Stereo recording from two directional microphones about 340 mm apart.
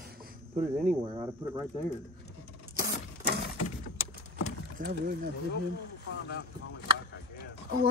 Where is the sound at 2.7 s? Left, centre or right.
Right.